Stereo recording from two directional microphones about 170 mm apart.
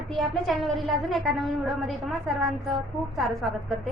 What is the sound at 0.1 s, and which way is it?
A woman's voice, centre (ahead or behind).